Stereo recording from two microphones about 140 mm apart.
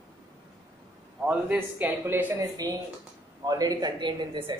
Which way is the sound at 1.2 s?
10° right (ahead or behind).